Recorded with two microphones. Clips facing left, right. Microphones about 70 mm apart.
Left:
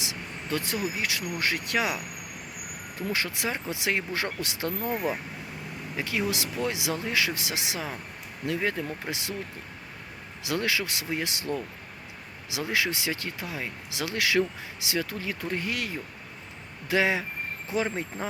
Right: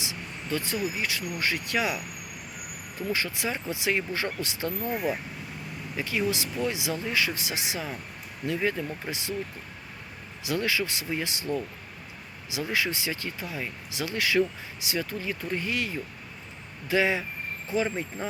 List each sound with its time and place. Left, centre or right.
0.0 s speech: left
3.1 s speech: left
6.0 s speech: left
10.4 s speech: left
12.5 s speech: left